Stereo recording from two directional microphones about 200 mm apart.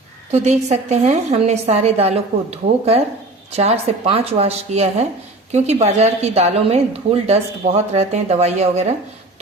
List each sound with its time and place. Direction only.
0.3 s speech: 35° right (ahead or behind)